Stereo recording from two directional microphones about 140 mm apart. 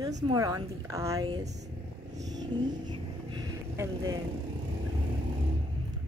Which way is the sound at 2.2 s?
30° right (ahead or behind).